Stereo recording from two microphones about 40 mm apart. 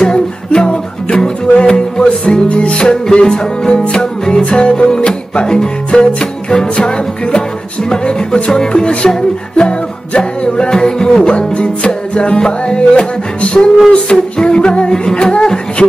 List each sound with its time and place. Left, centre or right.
0.0 s music: centre
7.9 s music: left
11.2 s music: left
14.0 s music: centre
15.8 s speech: centre